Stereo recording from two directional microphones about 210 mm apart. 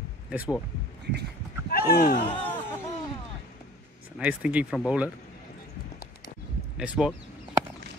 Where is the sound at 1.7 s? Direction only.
45° left (ahead or behind).